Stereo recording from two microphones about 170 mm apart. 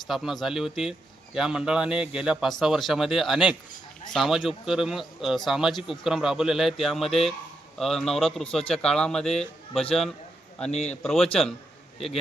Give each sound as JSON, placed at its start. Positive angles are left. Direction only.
{"t": 0.1, "sound": "speech", "side_deg": 0}
{"t": 10.7, "sound": "speech", "side_deg": 40}
{"t": 11.0, "sound": "speech", "side_deg": 0}